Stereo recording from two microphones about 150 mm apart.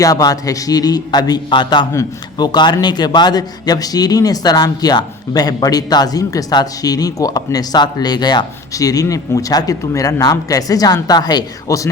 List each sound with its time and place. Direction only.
0.0 s a man's voice: 25° left (ahead or behind)